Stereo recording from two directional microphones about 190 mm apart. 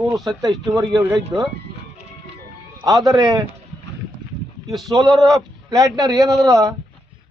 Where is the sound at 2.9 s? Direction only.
20° right (ahead or behind).